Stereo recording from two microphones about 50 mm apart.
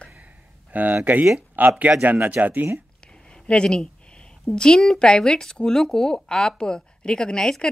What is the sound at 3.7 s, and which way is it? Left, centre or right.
A woman's voice, centre.